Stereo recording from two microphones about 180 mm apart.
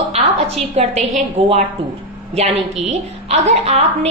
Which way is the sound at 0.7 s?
40° right (ahead or behind).